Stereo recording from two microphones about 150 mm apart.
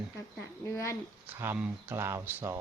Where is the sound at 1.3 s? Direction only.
15° right (ahead or behind).